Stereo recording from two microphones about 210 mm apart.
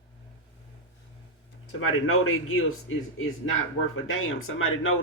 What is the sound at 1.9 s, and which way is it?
Speech, 80° left.